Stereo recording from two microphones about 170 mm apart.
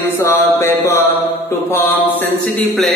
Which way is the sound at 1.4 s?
15° left (ahead or behind).